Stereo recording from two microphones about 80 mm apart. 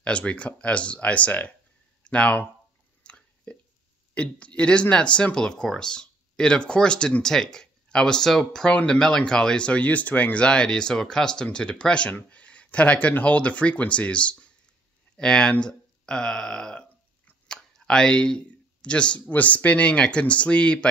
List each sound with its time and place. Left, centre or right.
0.0 s speech: centre
3.0 s a sound: centre
4.1 s speech: centre